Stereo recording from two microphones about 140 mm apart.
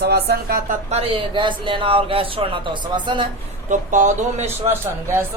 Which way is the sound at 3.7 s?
65° right (ahead or behind).